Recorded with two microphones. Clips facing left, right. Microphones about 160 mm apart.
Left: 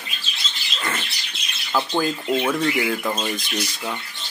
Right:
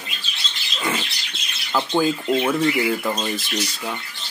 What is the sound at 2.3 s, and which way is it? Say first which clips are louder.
Speech: even; 5° right (ahead or behind).